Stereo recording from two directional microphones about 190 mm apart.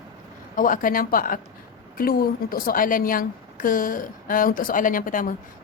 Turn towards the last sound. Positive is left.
turn(degrees=45)  # may be behind; listen again after turning